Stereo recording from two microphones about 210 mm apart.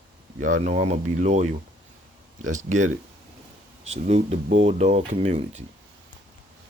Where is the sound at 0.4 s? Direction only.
35° right (ahead or behind).